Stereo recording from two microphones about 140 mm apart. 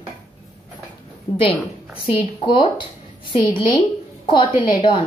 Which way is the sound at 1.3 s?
35° left (ahead or behind).